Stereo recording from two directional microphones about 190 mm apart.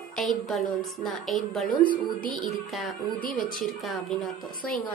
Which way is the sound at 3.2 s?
45° left (ahead or behind).